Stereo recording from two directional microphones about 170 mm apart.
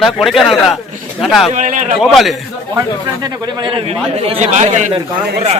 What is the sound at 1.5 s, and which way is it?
Speech, 50° right (ahead or behind).